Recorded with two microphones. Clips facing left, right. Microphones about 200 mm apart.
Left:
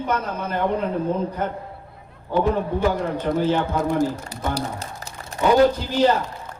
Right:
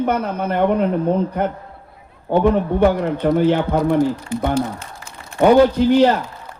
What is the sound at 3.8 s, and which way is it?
Speech, 45° left (ahead or behind).